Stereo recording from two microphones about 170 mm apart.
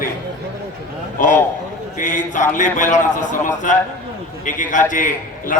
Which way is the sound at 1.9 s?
50° left (ahead or behind).